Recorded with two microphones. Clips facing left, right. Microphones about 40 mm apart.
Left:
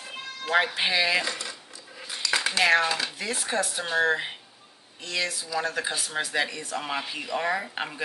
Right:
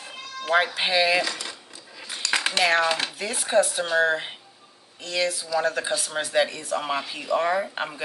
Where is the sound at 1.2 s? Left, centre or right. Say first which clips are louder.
Right 1 dB; right.